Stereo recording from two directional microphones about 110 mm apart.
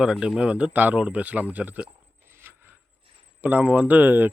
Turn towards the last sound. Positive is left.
turn(degrees=-15)  # may be behind; listen again after turning